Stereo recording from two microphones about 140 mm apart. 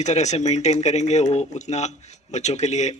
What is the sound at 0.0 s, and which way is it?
Speech, 55° left (ahead or behind).